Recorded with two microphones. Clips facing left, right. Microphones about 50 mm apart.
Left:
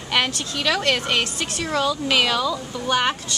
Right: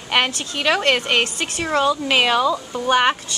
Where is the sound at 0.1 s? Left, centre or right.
Right.